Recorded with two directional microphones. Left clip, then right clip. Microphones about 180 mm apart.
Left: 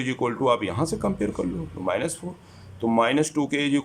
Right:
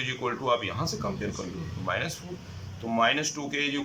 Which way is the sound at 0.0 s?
35° left (ahead or behind).